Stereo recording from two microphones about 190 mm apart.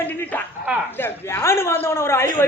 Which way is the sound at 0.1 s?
10° left (ahead or behind).